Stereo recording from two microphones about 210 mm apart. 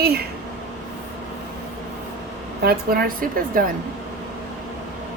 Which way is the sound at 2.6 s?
45° right (ahead or behind).